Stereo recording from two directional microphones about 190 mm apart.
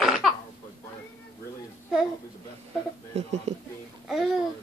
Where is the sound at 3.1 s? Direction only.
35° right (ahead or behind).